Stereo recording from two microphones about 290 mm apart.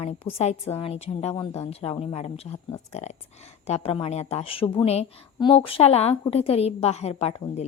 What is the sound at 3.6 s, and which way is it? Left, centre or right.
A woman's voice, left.